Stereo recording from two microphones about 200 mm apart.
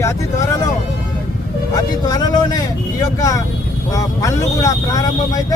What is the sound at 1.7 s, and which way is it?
Speech, 20° left (ahead or behind).